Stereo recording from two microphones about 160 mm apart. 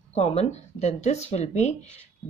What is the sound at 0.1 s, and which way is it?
A woman's voice, 40° left (ahead or behind).